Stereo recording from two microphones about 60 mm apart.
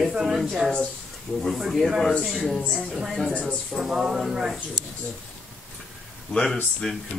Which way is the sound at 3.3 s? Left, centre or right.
Left.